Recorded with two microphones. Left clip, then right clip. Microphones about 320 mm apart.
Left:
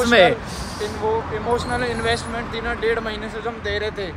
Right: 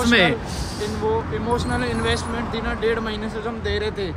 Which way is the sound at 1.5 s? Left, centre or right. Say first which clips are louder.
Left 1 dB; centre.